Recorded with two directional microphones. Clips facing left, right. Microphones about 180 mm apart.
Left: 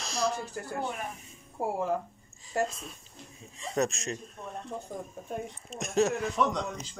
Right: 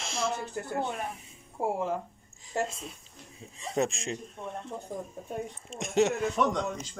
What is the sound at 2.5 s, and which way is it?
Speech, 25° right (ahead or behind).